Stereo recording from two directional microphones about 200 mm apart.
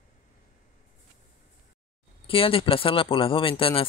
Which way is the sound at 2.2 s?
25° left (ahead or behind).